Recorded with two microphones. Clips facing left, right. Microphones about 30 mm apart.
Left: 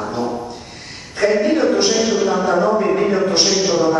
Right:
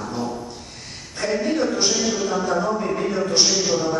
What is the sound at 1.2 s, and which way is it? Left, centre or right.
Speech, left.